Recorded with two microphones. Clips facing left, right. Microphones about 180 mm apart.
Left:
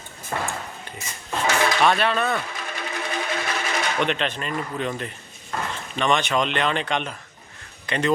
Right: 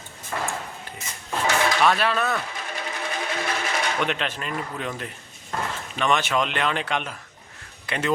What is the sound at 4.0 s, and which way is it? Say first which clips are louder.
Speech: left 2 dB; 5° right (ahead or behind).